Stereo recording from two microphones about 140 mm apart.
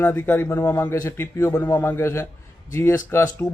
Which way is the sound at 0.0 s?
15° left (ahead or behind).